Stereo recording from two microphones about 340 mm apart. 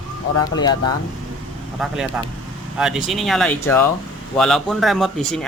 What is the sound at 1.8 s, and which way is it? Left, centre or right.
Speech, centre.